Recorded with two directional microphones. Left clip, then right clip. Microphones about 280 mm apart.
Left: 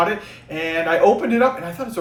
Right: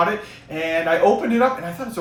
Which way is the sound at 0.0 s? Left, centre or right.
Centre.